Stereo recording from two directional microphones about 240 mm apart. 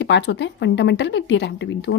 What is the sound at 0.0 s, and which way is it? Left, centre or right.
A woman's voice, left.